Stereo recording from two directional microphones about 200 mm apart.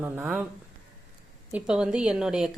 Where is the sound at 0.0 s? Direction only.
10° right (ahead or behind).